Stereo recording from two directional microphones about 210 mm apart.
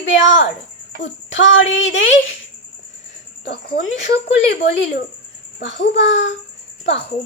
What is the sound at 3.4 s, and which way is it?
Speech, 50° left (ahead or behind).